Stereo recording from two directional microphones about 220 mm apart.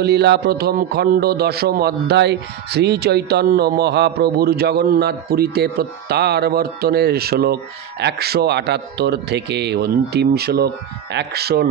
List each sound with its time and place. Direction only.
0.0 s a man's voice: 50° right (ahead or behind)